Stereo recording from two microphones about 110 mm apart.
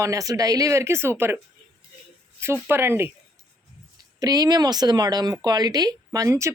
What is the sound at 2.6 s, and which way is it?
Speech, 20° right (ahead or behind).